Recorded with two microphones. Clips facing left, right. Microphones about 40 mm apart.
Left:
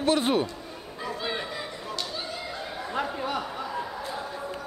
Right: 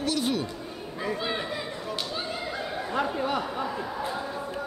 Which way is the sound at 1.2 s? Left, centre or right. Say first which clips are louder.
Left 2 dB; centre.